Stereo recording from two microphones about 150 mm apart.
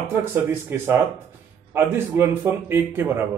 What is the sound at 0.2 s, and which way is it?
A man's voice, 15° right (ahead or behind).